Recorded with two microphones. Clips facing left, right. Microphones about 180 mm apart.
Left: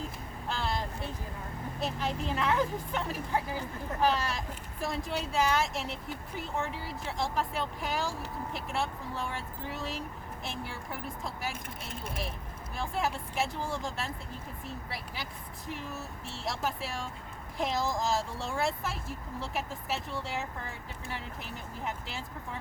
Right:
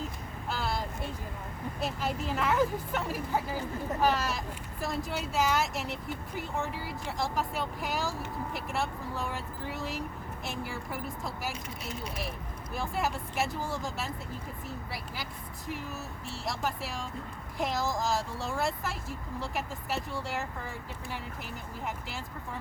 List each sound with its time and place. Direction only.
0.4 s vehicle: 5° right (ahead or behind)
1.8 s speech: 5° right (ahead or behind)
11.9 s speech: 55° left (ahead or behind)
12.7 s speech: centre (ahead or behind)